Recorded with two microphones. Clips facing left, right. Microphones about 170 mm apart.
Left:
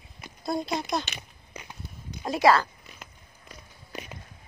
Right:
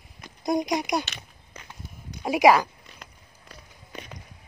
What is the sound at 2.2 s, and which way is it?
Speech, 15° right (ahead or behind).